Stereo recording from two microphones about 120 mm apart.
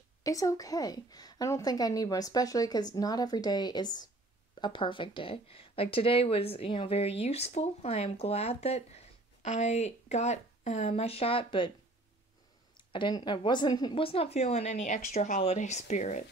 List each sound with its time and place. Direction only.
0.2 s a woman's voice: 30° left (ahead or behind); by 11.7 s 45° left (ahead or behind)
12.7 s speech: 40° left (ahead or behind); by 15.4 s 85° left
15.4 s speech: 75° left (ahead or behind)